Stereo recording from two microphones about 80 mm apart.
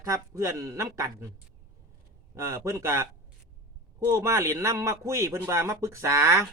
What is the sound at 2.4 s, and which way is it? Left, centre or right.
Speech, right.